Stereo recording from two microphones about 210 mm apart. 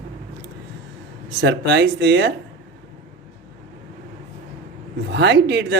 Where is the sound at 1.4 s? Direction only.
55° right (ahead or behind).